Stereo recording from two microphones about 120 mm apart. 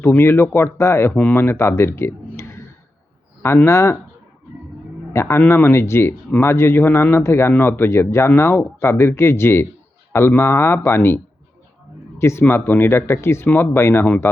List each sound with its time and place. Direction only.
0.0 s speech: 20° left (ahead or behind)
5.1 s speech: 25° left (ahead or behind)
12.2 s speech: 20° left (ahead or behind)